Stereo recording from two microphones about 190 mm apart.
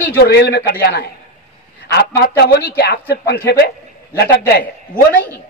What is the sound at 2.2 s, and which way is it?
Speech, 60° left (ahead or behind).